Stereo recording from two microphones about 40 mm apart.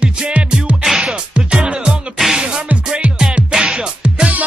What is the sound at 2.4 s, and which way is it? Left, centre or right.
Music, right.